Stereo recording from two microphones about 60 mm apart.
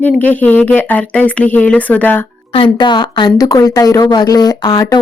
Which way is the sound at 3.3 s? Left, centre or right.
Left.